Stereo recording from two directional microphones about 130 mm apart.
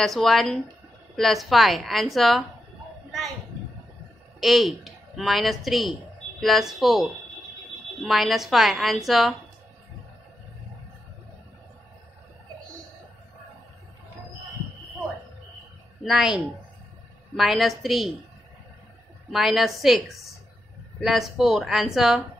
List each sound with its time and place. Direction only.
0.0 s a woman's voice: centre (ahead or behind)
4.4 s a woman's voice: centre (ahead or behind)
16.0 s a woman's voice: 5° right (ahead or behind)
17.4 s a woman's voice: centre (ahead or behind)
19.3 s a woman's voice: centre (ahead or behind)
21.0 s a woman's voice: centre (ahead or behind)